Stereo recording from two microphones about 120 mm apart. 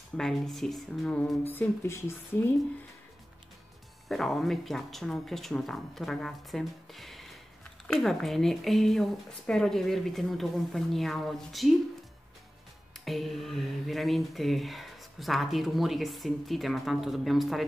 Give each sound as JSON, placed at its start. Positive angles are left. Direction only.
{"t": 0.2, "sound": "speech", "side_deg": 0}
{"t": 1.5, "sound": "a woman's voice", "side_deg": 20}
{"t": 4.1, "sound": "speech", "side_deg": 0}
{"t": 13.0, "sound": "speech", "side_deg": 0}